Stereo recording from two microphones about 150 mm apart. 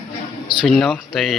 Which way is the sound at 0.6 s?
Centre (ahead or behind).